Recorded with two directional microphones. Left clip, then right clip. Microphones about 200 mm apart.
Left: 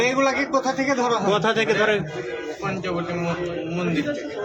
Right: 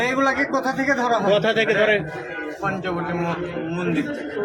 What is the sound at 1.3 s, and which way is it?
Speech, 20° left (ahead or behind).